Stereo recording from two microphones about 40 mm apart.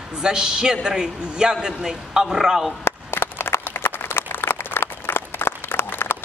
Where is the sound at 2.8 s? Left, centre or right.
Left.